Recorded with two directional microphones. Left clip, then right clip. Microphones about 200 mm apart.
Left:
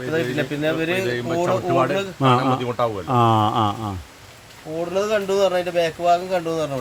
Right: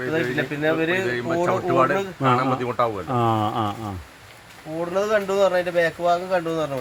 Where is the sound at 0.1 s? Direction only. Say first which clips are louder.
Left 3 dB; 35° left (ahead or behind).